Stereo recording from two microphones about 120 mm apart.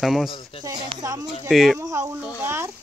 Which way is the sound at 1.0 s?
25° right (ahead or behind).